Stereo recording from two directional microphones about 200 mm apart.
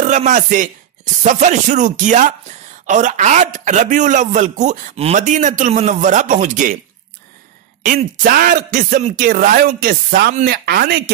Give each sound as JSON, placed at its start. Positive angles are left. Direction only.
{"t": 0.0, "sound": "speech", "side_deg": -40}
{"t": 7.8, "sound": "speech", "side_deg": -45}